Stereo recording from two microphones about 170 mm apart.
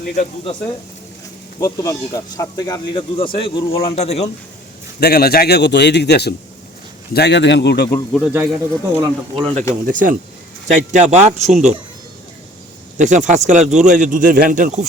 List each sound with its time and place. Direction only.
1.5 s speech: 20° left (ahead or behind)
3.2 s speech: 30° left (ahead or behind)
4.9 s a man's voice: 70° left (ahead or behind); by 7.9 s 85° left
7.9 s speech: 10° left (ahead or behind)
8.3 s speech: 15° right (ahead or behind)
9.0 s speech: 30° right (ahead or behind)
9.8 s speech: 55° right (ahead or behind)
13.0 s speech: 45° right (ahead or behind)